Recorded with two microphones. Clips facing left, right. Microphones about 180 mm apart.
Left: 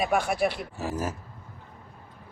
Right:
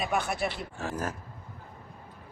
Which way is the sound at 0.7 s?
5° left (ahead or behind).